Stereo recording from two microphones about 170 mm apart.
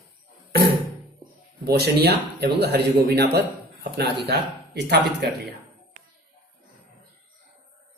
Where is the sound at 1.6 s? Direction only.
70° right (ahead or behind).